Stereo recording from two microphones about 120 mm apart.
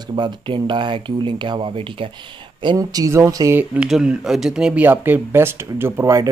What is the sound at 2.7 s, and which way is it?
Speech, 30° right (ahead or behind).